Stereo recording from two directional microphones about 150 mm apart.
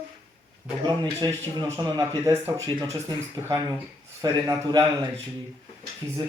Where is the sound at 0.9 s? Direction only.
30° right (ahead or behind).